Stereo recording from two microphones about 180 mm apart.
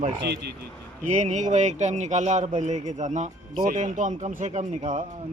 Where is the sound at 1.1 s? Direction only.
40° right (ahead or behind).